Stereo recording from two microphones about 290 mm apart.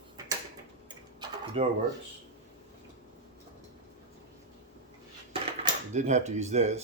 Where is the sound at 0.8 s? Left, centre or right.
Centre.